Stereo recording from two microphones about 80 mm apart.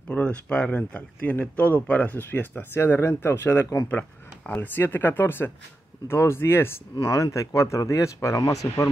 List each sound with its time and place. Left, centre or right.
0.1 s speech: centre; by 8.9 s left